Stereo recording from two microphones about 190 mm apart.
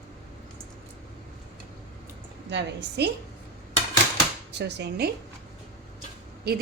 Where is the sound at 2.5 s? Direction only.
65° right (ahead or behind).